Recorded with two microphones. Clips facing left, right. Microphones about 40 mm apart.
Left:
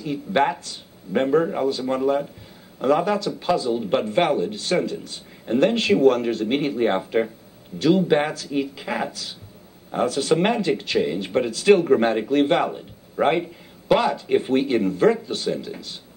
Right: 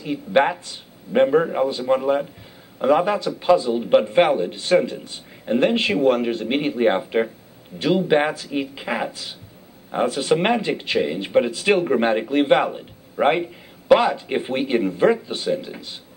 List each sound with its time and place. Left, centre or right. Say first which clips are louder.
0.0 s a man's voice: right 2 dB; centre